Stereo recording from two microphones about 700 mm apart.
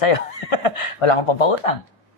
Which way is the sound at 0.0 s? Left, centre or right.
Left.